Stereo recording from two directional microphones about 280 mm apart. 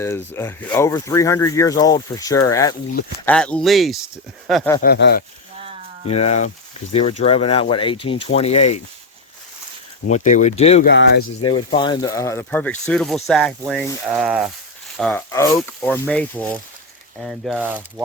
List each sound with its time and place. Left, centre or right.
0.0 s speech: centre
4.8 s speech: left
6.1 s speech: left
10.1 s speech: left
10.8 s speech: left
11.3 s speech: centre